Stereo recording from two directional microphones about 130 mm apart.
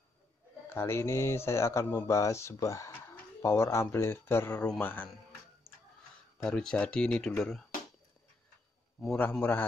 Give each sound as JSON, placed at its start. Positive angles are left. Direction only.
{"t": 0.7, "sound": "speech", "side_deg": 20}
{"t": 6.4, "sound": "speech", "side_deg": 5}
{"t": 9.1, "sound": "speech", "side_deg": 15}